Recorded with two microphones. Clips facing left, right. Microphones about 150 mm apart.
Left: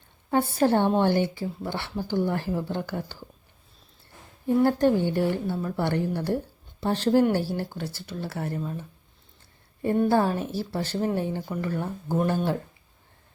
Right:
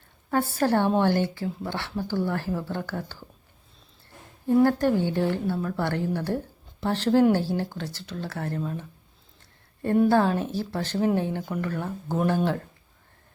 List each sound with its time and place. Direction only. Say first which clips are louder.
0.3 s a woman's voice: left 2 dB; 20° left (ahead or behind)
4.4 s a woman's voice: even; 15° left (ahead or behind)
10.1 s a woman's voice: right 1 dB; 10° left (ahead or behind)